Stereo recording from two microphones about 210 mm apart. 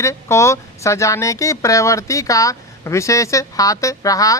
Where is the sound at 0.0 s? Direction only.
15° left (ahead or behind).